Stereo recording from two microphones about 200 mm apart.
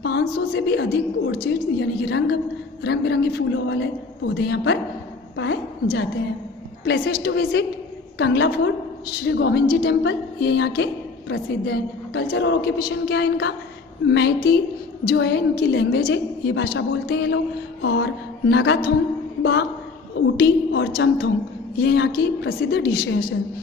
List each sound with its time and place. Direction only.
0.0 s a woman's voice: 55° left (ahead or behind)
20.3 s a woman's voice: 60° left (ahead or behind)